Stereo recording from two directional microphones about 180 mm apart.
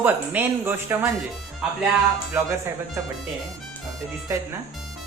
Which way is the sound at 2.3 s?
10° right (ahead or behind).